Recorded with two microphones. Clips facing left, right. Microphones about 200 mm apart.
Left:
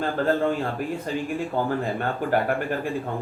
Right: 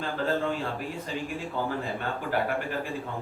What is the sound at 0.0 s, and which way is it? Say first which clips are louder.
Speech: left 6 dB; 50° left (ahead or behind).